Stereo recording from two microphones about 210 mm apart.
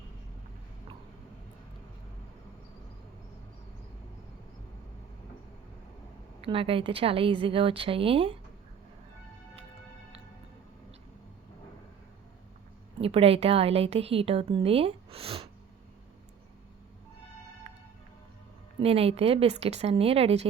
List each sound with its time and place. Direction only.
6.4 s speech: 25° right (ahead or behind)
13.0 s speech: 30° right (ahead or behind)
17.7 s music: 30° right (ahead or behind)
18.8 s speech: 30° right (ahead or behind)